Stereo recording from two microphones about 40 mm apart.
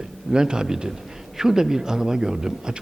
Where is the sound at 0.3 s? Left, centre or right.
Centre.